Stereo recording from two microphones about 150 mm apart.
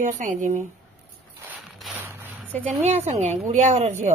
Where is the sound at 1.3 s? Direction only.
10° right (ahead or behind).